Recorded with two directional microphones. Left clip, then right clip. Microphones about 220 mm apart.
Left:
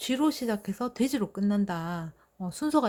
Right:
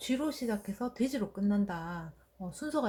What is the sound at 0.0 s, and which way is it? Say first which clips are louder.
Speech: left 6 dB; 50° left (ahead or behind).